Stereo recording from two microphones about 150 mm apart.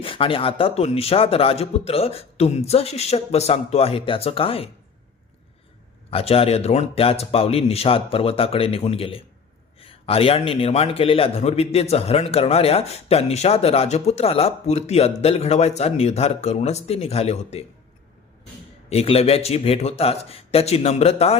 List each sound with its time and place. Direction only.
0.0 s speech: 35° left (ahead or behind)
6.1 s a man's voice: 40° left (ahead or behind)
18.9 s speech: 40° left (ahead or behind)